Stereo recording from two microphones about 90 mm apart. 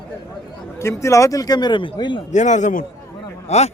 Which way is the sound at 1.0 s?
35° left (ahead or behind).